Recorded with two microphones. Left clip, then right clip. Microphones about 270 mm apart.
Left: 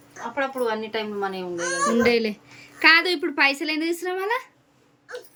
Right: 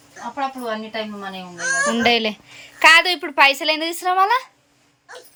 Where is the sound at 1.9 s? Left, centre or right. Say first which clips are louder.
Right 3 dB; centre.